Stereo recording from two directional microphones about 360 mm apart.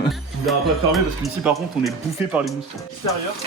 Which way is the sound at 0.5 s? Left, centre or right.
Centre.